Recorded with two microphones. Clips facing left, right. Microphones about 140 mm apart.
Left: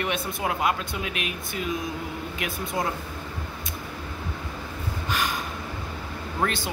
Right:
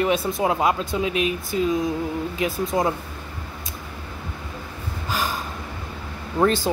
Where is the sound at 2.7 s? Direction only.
30° right (ahead or behind).